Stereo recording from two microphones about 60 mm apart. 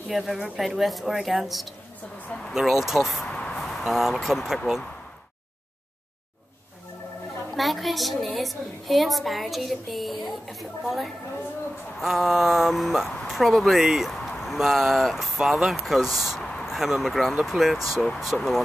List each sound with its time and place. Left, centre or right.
0.1 s a woman's voice: centre
3.3 s a sound: centre
3.5 s speech: centre
7.5 s a woman's voice: centre
17.7 s speech: right
18.0 s a woman's voice: centre